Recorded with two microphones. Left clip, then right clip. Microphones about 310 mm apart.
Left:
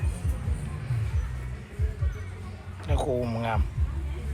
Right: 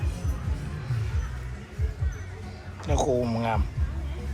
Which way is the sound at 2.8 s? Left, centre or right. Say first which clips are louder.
Right 3 dB; centre.